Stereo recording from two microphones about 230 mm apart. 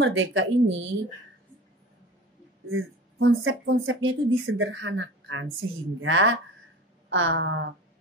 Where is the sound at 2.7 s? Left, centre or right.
Right.